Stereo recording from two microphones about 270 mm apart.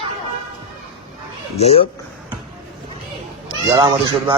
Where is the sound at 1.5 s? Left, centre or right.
Left.